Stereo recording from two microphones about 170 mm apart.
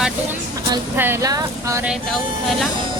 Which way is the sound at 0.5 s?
15° right (ahead or behind).